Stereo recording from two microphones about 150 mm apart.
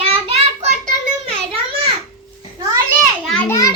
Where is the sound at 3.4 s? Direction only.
20° left (ahead or behind).